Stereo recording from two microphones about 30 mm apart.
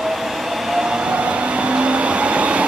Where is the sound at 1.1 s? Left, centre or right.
Right.